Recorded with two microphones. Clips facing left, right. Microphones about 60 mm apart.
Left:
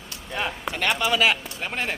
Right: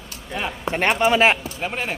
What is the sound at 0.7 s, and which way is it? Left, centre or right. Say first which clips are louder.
Speech: right 6 dB; right.